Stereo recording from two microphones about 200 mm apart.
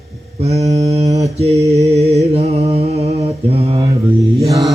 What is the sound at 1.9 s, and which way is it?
Mantra, 30° right (ahead or behind).